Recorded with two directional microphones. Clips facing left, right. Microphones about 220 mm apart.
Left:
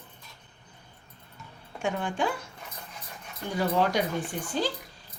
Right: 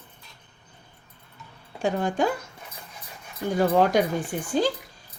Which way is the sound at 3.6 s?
45° right (ahead or behind).